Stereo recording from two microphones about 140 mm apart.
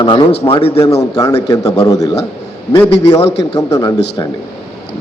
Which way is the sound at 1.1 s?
25° left (ahead or behind).